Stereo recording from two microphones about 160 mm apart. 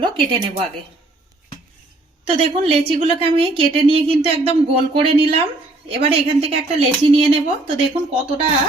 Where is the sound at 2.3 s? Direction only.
35° right (ahead or behind).